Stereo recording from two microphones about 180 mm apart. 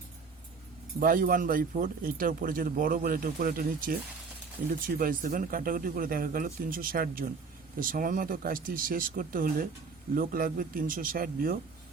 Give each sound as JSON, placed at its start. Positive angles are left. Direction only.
{"t": 0.9, "sound": "speech", "side_deg": -50}
{"t": 4.9, "sound": "speech", "side_deg": -50}